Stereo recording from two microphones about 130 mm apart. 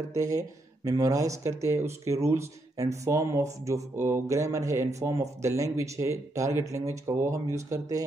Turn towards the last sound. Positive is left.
turn(degrees=-25)  # may be behind; listen again after turning